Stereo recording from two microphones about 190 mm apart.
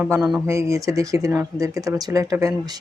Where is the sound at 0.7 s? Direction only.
15° right (ahead or behind).